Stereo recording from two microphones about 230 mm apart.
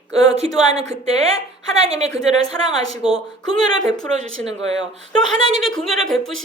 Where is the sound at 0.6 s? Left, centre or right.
Centre.